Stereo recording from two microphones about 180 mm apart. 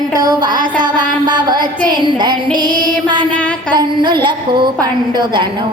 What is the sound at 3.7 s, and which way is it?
A woman's voice, 25° right (ahead or behind).